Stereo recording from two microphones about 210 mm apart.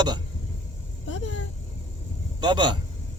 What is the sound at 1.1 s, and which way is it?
Speech, 60° left (ahead or behind).